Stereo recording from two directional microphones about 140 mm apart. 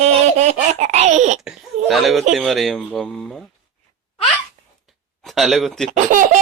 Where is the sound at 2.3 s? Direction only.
Centre (ahead or behind).